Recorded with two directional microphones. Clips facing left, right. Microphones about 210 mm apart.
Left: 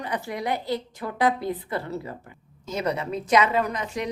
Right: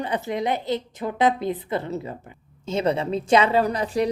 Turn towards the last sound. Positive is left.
turn(degrees=-35)  # may be behind; listen again after turning